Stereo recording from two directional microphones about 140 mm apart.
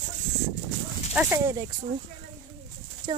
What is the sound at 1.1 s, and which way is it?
Speech, 10° right (ahead or behind).